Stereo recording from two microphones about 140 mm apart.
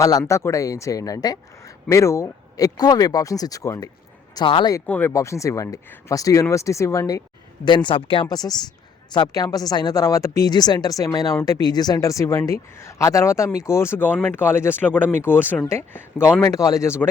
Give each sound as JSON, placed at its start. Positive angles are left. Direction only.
{"t": 0.0, "sound": "speech", "side_deg": 25}
{"t": 4.9, "sound": "speech", "side_deg": 15}
{"t": 7.6, "sound": "speech", "side_deg": 35}